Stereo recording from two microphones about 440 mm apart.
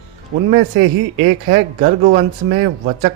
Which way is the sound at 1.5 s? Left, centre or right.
Centre.